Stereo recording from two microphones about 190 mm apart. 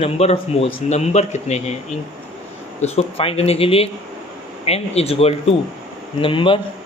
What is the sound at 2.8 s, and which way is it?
Speech, 30° left (ahead or behind).